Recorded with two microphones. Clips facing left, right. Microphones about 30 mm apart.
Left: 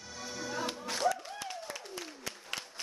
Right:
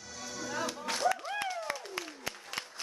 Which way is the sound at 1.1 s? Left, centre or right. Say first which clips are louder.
Right 4 dB; right.